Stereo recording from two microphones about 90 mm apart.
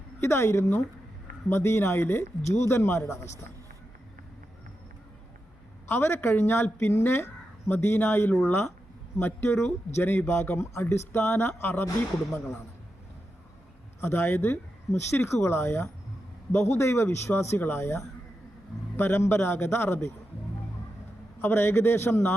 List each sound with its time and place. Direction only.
0.2 s a woman's voice: 30° left (ahead or behind)
5.9 s a man's voice: 25° left (ahead or behind)
14.0 s a man's voice: 25° left (ahead or behind)
21.4 s a man's voice: 25° left (ahead or behind)